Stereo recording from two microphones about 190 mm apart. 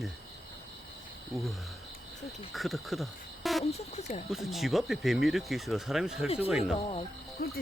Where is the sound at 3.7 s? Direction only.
35° left (ahead or behind).